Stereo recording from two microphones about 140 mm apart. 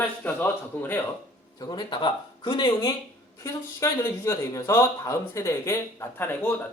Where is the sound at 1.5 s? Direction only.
30° left (ahead or behind).